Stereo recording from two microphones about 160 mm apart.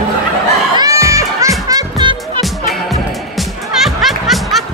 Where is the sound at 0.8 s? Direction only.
20° right (ahead or behind).